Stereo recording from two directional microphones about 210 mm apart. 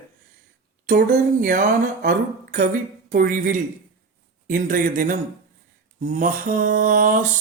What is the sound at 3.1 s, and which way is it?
Mantra, 40° right (ahead or behind).